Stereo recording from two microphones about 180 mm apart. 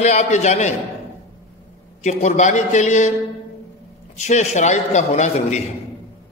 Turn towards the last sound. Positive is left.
turn(degrees=40)  # may be behind; listen again after turning